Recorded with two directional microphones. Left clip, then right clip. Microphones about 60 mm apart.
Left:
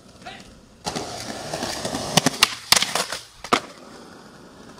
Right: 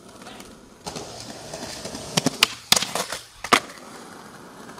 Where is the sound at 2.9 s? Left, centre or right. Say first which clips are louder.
Left 3 dB; centre.